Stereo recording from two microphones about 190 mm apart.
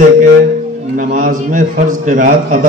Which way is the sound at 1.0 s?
45° right (ahead or behind).